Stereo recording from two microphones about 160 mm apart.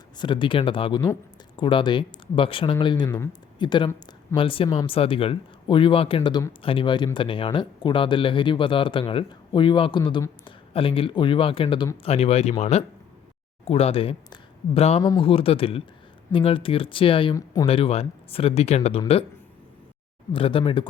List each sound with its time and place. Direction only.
0.2 s speech: 30° left (ahead or behind)
15.0 s speech: 25° left (ahead or behind)
15.3 s speech: 35° left (ahead or behind)
17.3 s speech: 20° left (ahead or behind)
17.7 s speech: 35° left (ahead or behind)
20.3 s speech: 35° left (ahead or behind)